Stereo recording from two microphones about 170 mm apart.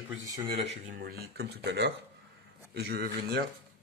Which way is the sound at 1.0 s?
65° right (ahead or behind).